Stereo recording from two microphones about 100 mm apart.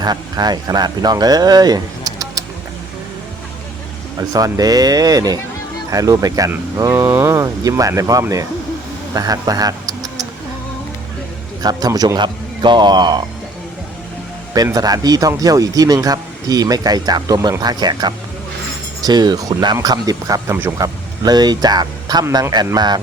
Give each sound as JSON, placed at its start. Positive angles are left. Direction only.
{"t": 0.0, "sound": "speech", "side_deg": -45}
{"t": 4.2, "sound": "speech", "side_deg": -35}
{"t": 11.6, "sound": "speech", "side_deg": -40}
{"t": 14.5, "sound": "speech", "side_deg": -40}
{"t": 20.5, "sound": "speech", "side_deg": -25}
{"t": 20.7, "sound": "speech", "side_deg": -40}